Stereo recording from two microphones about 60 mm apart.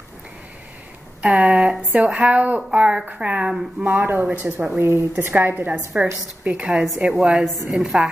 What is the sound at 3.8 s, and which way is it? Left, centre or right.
Speech, right.